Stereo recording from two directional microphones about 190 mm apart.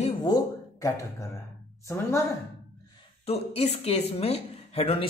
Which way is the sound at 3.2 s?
30° left (ahead or behind).